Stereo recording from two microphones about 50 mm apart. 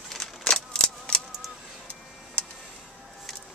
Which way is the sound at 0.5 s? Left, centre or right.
Centre.